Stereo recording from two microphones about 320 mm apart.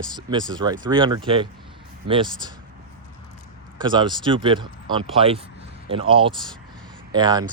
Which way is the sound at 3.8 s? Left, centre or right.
Centre.